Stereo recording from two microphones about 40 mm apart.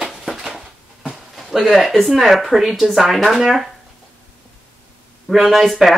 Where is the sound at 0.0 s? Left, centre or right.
Centre.